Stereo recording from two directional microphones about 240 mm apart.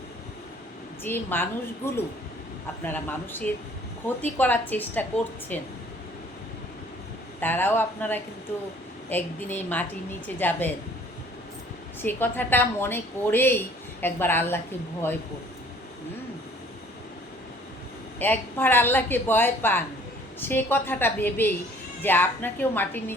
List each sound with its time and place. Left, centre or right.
1.0 s speech: centre
7.4 s speech: centre
12.0 s speech: centre
18.2 s speech: centre